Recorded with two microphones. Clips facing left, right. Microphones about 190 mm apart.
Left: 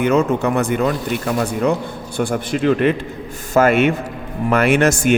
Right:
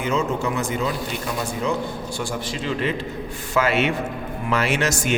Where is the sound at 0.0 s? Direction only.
60° left (ahead or behind).